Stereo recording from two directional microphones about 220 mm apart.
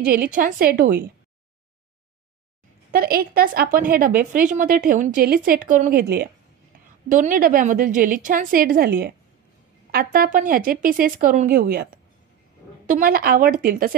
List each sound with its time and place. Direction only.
0.0 s a woman's voice: 40° right (ahead or behind)
2.9 s a woman's voice: 45° right (ahead or behind)
7.1 s a woman's voice: 35° right (ahead or behind)